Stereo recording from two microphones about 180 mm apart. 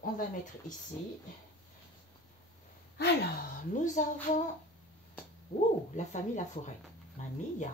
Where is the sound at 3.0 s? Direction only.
65° left (ahead or behind).